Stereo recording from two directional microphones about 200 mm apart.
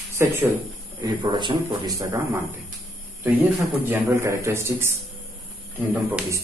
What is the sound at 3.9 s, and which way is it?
A man's voice, 10° right (ahead or behind).